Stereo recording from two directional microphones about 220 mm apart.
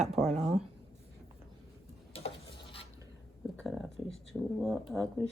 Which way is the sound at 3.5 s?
5° right (ahead or behind).